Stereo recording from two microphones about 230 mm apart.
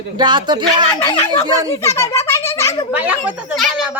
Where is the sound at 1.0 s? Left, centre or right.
Centre.